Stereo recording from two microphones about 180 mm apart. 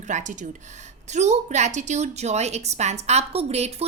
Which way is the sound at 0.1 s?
45° right (ahead or behind).